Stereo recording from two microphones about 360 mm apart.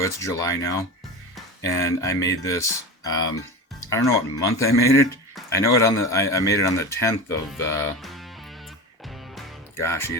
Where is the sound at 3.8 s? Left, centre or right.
Centre.